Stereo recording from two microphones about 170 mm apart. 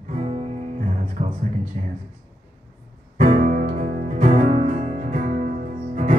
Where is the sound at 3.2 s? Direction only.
40° right (ahead or behind).